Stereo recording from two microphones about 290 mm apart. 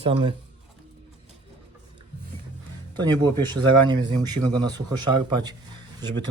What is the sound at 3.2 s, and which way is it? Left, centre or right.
A man's voice, centre.